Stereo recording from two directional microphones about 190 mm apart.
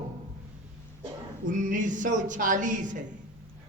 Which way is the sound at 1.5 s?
45° right (ahead or behind).